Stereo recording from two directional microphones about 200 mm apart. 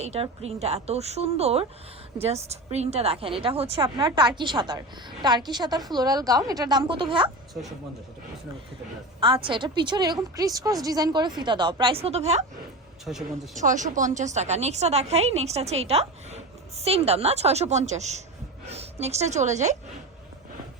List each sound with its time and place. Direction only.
0.0 s a woman's voice: 30° right (ahead or behind)
9.2 s a woman's voice: 25° right (ahead or behind)
13.1 s a woman's voice: centre (ahead or behind)
13.6 s a woman's voice: 40° right (ahead or behind)